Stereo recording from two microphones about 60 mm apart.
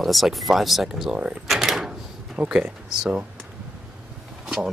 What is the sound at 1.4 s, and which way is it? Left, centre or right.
Drawer open or close, centre.